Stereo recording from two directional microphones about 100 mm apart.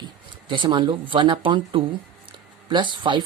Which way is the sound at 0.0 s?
55° right (ahead or behind).